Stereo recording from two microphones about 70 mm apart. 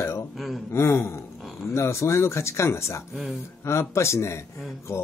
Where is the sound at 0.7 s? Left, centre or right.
Left.